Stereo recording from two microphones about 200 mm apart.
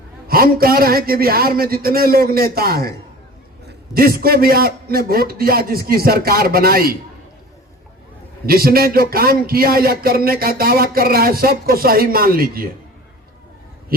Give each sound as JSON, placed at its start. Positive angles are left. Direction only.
{"t": 0.3, "sound": "speech", "side_deg": -50}
{"t": 8.4, "sound": "speech", "side_deg": -50}